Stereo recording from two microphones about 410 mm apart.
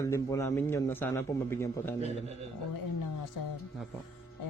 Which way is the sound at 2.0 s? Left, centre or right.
Centre.